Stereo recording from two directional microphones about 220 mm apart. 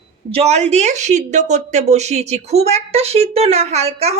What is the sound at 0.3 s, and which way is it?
A woman's voice, 30° right (ahead or behind).